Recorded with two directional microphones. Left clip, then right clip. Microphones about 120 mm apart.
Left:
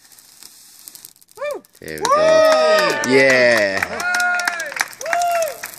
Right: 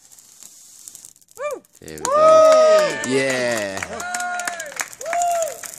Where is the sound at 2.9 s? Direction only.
10° left (ahead or behind).